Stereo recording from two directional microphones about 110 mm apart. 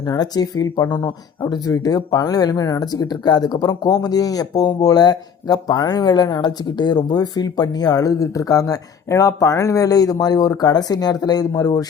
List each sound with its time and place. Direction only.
0.0 s speech: 40° left (ahead or behind)